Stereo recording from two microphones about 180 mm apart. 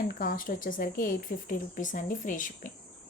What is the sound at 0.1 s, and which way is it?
Speech, 50° left (ahead or behind).